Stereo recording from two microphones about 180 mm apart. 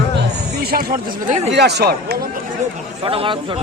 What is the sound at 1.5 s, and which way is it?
Speech, 70° right (ahead or behind).